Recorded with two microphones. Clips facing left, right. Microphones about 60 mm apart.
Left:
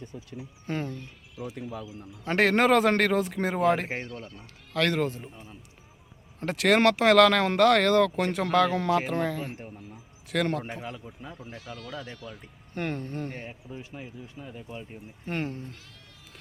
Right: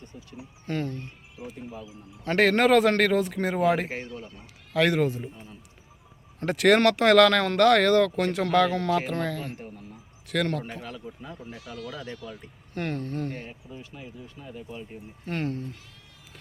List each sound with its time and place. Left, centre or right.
0.6 s speech: centre
1.5 s speech: left
2.2 s speech: centre
6.4 s speech: centre
11.0 s speech: centre